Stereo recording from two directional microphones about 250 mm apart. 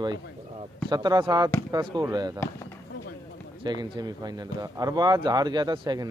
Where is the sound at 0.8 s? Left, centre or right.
Centre.